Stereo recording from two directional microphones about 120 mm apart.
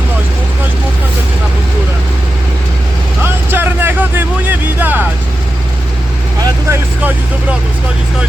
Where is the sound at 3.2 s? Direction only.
20° right (ahead or behind).